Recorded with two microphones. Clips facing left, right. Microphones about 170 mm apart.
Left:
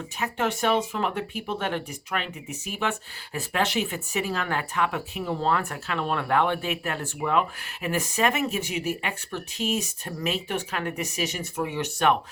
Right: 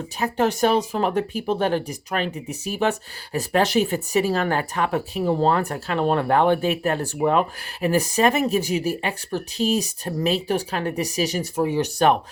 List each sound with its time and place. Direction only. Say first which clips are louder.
0.2 s speech: right 6 dB; 40° right (ahead or behind)